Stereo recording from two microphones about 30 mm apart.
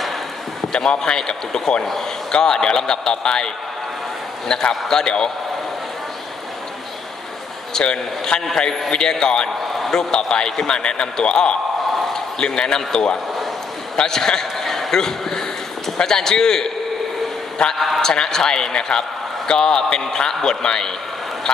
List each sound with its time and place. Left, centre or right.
0.7 s a man's voice: left
4.5 s a man's voice: left
7.8 s a man's voice: left
14.6 s a sound: centre
16.0 s a man's voice: left
17.7 s a man's voice: centre
18.0 s a man's voice: left